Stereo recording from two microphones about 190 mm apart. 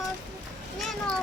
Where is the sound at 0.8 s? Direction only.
Centre (ahead or behind).